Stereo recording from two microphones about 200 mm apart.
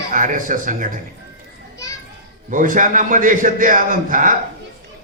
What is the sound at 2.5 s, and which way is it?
A man's voice, 40° right (ahead or behind).